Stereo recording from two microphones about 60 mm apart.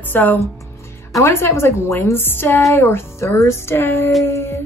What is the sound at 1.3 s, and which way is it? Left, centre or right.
A woman's voice, left.